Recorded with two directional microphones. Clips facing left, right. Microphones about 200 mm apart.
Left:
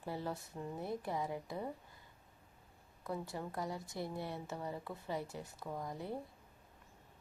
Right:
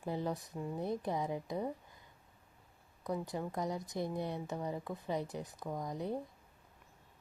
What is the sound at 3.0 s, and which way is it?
Speech, 15° right (ahead or behind).